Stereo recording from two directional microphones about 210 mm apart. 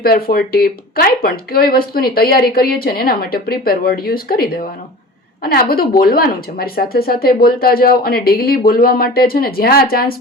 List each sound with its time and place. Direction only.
0.0 s speech: 45° left (ahead or behind)